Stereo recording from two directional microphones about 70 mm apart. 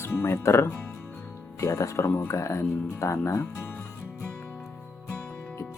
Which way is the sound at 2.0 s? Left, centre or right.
Left.